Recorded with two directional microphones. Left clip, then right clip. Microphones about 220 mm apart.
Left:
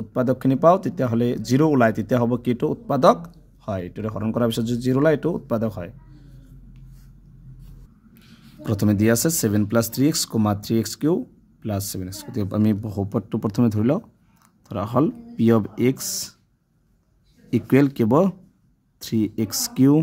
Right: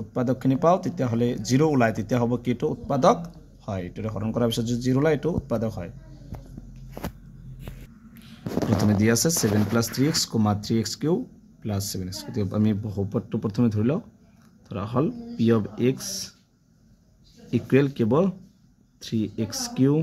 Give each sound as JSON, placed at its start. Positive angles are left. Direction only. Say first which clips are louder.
{"t": 0.1, "sound": "speech", "louder": "left 4 dB", "side_deg": 55}
{"t": 8.1, "sound": "speech", "louder": "right 18 dB", "side_deg": 50}
{"t": 17.5, "sound": "speech", "louder": "left 3 dB", "side_deg": 55}